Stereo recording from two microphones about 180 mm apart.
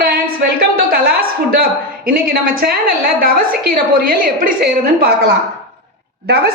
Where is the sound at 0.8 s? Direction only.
55° right (ahead or behind).